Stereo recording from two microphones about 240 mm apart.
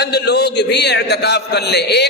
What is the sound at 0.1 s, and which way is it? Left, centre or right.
A man's voice, left.